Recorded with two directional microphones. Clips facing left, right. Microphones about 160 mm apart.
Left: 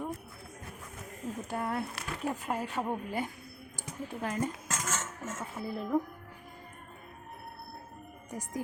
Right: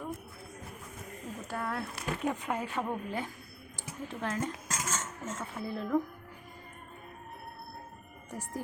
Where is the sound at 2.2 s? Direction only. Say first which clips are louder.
Even; 5° left (ahead or behind).